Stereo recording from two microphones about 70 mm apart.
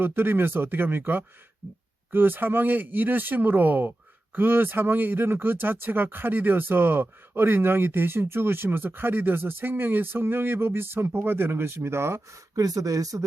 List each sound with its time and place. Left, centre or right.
0.0 s speech: right
12.5 s speech: right